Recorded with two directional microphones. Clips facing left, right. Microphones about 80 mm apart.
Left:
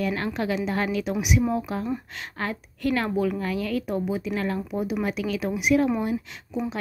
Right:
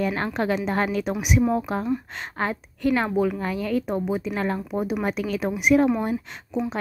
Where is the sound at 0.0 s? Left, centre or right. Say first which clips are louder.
Right 2 dB; right.